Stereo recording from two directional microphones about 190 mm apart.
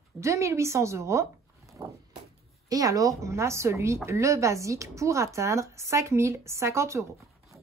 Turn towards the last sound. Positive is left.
turn(degrees=-15)  # may be behind; listen again after turning